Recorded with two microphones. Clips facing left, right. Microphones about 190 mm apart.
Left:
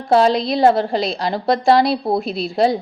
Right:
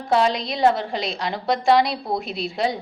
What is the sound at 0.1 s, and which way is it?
A woman's voice, 35° left (ahead or behind).